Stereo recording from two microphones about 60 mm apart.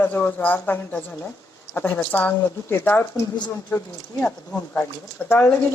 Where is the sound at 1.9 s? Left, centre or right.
Left.